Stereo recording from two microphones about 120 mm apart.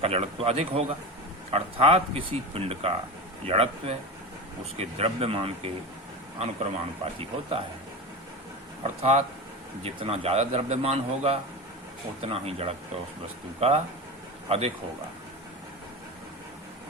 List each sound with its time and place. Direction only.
0.0 s a man's voice: 55° right (ahead or behind)
8.8 s a man's voice: 60° right (ahead or behind)